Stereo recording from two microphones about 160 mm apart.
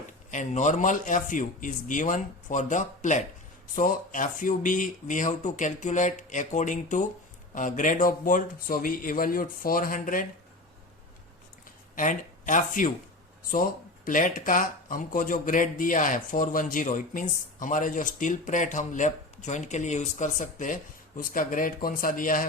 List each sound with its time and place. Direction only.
0.3 s speech: 50° left (ahead or behind)
11.9 s speech: 55° left (ahead or behind)